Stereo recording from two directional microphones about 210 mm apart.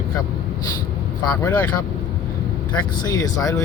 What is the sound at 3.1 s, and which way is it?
Speech, 15° left (ahead or behind).